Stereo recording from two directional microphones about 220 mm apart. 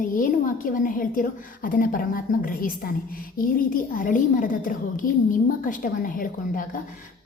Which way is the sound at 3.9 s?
40° left (ahead or behind).